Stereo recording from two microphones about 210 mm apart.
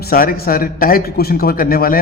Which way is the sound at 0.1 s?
45° left (ahead or behind).